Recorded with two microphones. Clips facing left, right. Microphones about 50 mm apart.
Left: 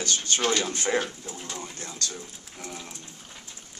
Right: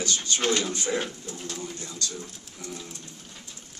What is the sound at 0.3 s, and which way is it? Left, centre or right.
Speech, left.